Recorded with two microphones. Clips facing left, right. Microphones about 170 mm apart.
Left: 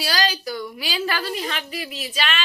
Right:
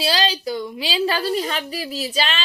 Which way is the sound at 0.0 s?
25° right (ahead or behind).